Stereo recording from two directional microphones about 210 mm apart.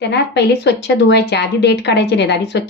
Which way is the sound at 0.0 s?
55° left (ahead or behind).